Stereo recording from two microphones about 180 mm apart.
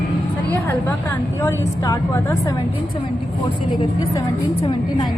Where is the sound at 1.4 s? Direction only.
15° left (ahead or behind).